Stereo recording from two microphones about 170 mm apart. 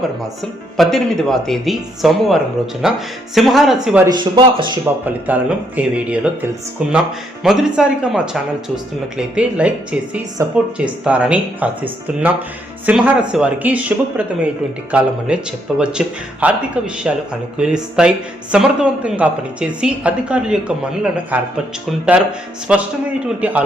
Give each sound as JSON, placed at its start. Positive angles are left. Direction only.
{"t": 0.8, "sound": "speech", "side_deg": 0}
{"t": 4.0, "sound": "speech", "side_deg": -25}
{"t": 5.0, "sound": "a woman's voice", "side_deg": -10}